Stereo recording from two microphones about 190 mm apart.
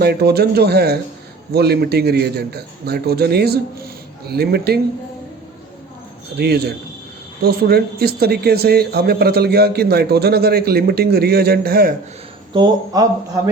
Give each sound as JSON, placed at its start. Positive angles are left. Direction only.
{"t": 0.0, "sound": "speech", "side_deg": -55}
{"t": 6.3, "sound": "speech", "side_deg": -55}
{"t": 12.5, "sound": "a man's voice", "side_deg": -20}